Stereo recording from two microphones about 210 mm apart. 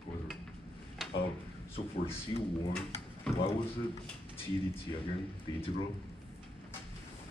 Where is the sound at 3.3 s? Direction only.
5° left (ahead or behind).